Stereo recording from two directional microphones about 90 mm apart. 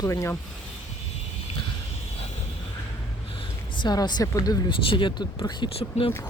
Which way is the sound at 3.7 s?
50° left (ahead or behind).